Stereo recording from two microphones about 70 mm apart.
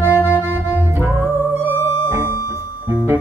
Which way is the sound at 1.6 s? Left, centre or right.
Right.